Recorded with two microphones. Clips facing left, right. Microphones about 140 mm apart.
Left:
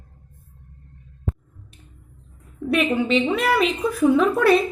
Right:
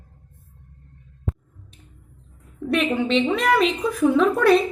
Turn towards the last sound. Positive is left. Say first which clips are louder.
# even
turn(degrees=5)  # may be behind; listen again after turning